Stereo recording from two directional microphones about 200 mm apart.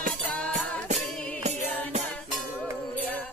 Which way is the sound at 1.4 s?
35° right (ahead or behind).